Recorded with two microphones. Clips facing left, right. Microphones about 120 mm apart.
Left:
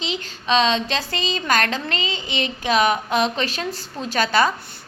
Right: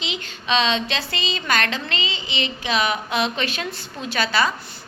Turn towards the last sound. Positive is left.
turn(degrees=45)  # may be behind; listen again after turning